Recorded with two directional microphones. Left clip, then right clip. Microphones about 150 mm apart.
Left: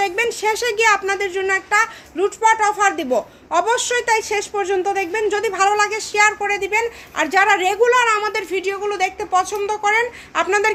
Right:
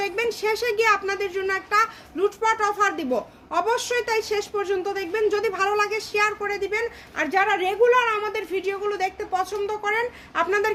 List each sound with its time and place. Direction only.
0.0 s a woman's voice: 15° left (ahead or behind)